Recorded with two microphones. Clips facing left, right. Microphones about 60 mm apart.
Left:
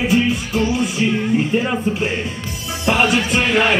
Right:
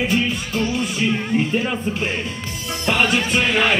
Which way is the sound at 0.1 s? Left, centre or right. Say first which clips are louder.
Left 4 dB; centre.